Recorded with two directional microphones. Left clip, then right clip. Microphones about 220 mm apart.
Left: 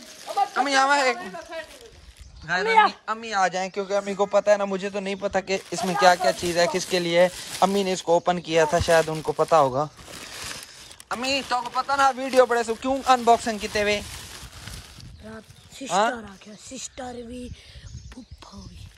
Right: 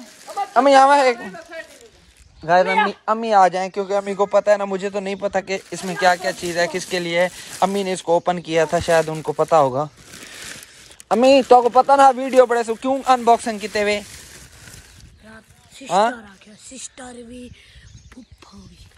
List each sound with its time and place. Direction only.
0.7 s speech: centre (ahead or behind)
2.6 s speech: 45° left (ahead or behind)
3.2 s speech: centre (ahead or behind)
3.9 s speech: 15° left (ahead or behind)
11.1 s speech: 5° right (ahead or behind); by 14.0 s 10° left (ahead or behind)
14.1 s frying: 30° left (ahead or behind)
15.2 s a sound: 35° left (ahead or behind)
16.1 s speech: 45° left (ahead or behind)